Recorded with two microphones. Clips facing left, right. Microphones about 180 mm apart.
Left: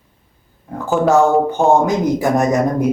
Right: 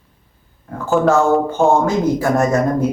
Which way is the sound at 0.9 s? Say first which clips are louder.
Right 1 dB; centre (ahead or behind).